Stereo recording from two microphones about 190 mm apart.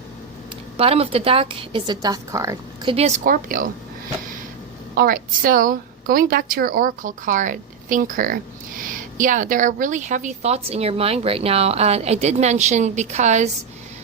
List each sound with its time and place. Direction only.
0.8 s a woman's voice: 30° right (ahead or behind)
2.9 s a woman's voice: 35° right (ahead or behind)
3.2 s a woman's voice: 45° right (ahead or behind)
4.9 s a woman's voice: 50° right (ahead or behind)